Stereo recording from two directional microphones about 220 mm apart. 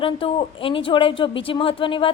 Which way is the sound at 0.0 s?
25° left (ahead or behind).